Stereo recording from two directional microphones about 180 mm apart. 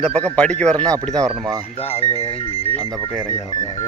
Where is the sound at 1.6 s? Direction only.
35° left (ahead or behind).